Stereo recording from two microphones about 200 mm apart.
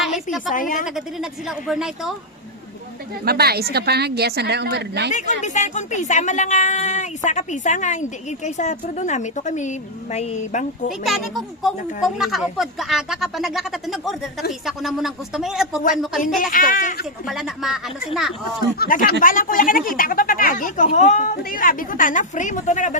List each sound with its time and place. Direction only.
0.0 s a woman's voice: centre (ahead or behind)
0.5 s speech: 40° left (ahead or behind)
0.9 s speech: centre (ahead or behind)
3.2 s a woman's voice: 50° right (ahead or behind)
5.1 s speech: 35° left (ahead or behind)
11.0 s speech: centre (ahead or behind)
16.2 s a woman's voice: 45° left (ahead or behind)
17.2 s speech: centre (ahead or behind)
18.8 s a woman's voice: 45° left (ahead or behind)